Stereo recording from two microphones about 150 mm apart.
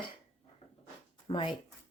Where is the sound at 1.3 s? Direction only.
35° left (ahead or behind).